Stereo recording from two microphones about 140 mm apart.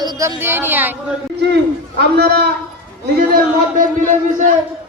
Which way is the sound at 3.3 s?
90° right.